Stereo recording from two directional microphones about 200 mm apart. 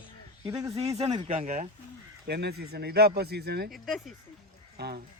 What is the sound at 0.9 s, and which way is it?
Speech, 30° right (ahead or behind).